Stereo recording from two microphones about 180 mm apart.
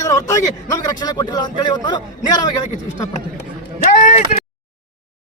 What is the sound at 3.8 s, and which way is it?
Speech, 45° left (ahead or behind).